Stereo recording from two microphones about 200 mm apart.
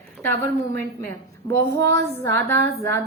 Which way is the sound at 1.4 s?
15° left (ahead or behind).